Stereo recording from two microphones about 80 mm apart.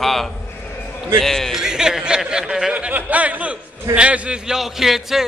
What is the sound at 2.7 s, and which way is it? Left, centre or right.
A man's voice, centre.